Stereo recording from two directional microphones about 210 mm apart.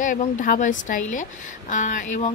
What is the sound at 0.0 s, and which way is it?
A woman's voice, 40° left (ahead or behind).